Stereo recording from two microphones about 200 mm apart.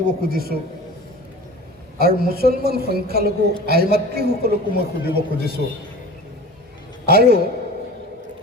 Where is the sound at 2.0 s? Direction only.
50° right (ahead or behind).